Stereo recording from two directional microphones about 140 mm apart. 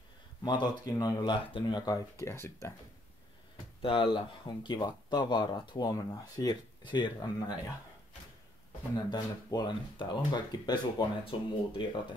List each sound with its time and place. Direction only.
0.4 s speech: 30° left (ahead or behind)
3.8 s speech: 35° left (ahead or behind)
8.9 s speech: 30° left (ahead or behind)